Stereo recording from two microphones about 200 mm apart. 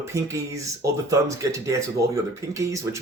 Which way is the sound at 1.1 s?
15° right (ahead or behind).